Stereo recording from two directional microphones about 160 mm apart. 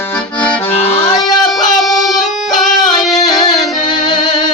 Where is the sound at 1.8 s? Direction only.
Centre (ahead or behind).